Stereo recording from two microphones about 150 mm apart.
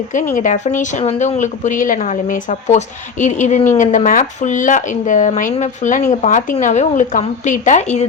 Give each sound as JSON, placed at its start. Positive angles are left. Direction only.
{"t": 0.3, "sound": "speech", "side_deg": 55}